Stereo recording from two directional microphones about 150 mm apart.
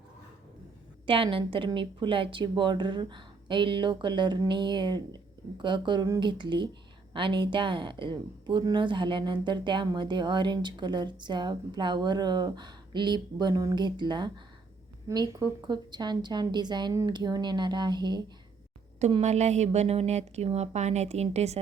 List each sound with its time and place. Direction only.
1.0 s a woman's voice: 35° right (ahead or behind)
19.2 s a woman's voice: 50° right (ahead or behind)